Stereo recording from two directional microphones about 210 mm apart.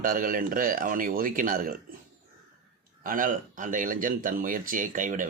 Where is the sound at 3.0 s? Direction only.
40° right (ahead or behind).